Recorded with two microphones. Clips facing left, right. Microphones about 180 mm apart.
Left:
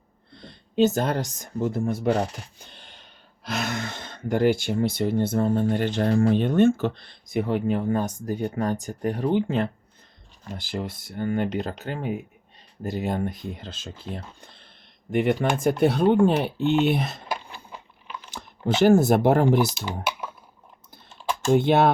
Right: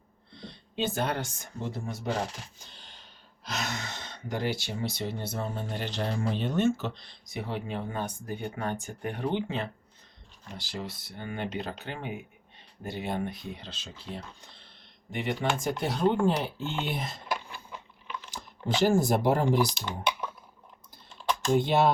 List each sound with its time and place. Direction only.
0.3 s speech: 50° left (ahead or behind)
3.4 s speech: 55° left (ahead or behind); by 17.2 s 70° left (ahead or behind)
18.8 s speech: 65° left (ahead or behind)
21.5 s speech: 65° left (ahead or behind)